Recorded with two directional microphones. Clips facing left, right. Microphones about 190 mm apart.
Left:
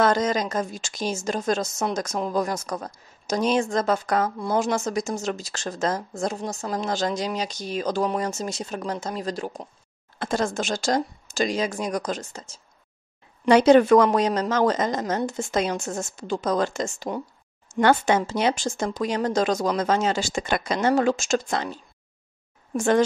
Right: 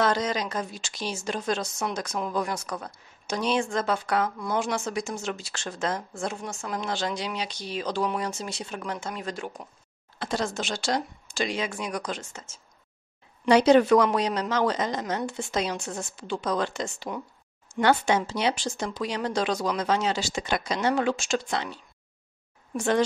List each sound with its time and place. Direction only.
0.0 s a woman's voice: 45° left (ahead or behind)
10.1 s a woman's voice: 50° left (ahead or behind)
13.5 s a woman's voice: 50° left (ahead or behind)
22.8 s a woman's voice: 45° left (ahead or behind)